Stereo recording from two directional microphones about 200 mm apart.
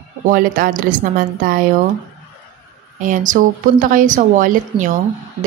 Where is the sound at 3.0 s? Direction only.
40° right (ahead or behind).